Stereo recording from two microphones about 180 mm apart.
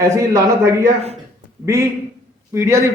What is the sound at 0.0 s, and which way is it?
A man's voice, 15° right (ahead or behind).